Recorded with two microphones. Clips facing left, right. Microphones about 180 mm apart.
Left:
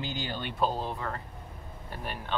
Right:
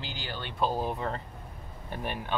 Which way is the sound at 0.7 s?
15° right (ahead or behind).